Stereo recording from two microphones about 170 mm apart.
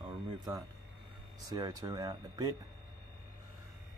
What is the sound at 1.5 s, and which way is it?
Speech, 20° right (ahead or behind).